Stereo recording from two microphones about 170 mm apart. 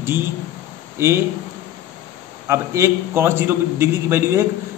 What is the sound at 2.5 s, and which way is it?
A man's voice, 15° right (ahead or behind).